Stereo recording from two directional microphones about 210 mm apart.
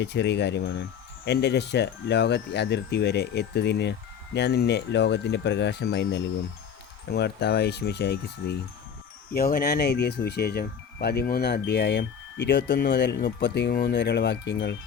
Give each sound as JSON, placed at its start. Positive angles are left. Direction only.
{"t": 0.0, "sound": "speech", "side_deg": 55}